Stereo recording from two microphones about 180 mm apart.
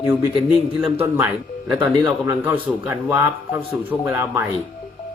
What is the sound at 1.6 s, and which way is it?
A man's voice, 5° right (ahead or behind).